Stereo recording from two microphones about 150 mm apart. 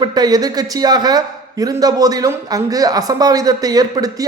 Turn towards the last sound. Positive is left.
turn(degrees=-25)  # may be behind; listen again after turning